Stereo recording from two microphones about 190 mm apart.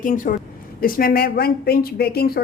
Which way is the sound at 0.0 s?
45° left (ahead or behind).